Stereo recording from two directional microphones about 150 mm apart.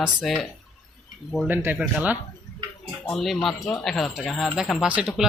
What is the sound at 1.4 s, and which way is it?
Speech, 15° right (ahead or behind).